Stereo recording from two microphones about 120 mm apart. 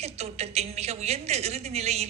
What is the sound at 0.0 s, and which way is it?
A woman's voice, 60° right (ahead or behind).